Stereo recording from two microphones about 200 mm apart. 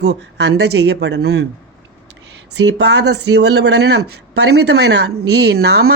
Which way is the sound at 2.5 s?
60° right (ahead or behind).